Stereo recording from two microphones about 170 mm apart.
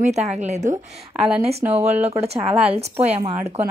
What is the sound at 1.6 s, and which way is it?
Speech, 15° right (ahead or behind).